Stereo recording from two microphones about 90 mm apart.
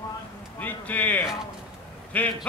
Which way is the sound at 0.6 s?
20° left (ahead or behind).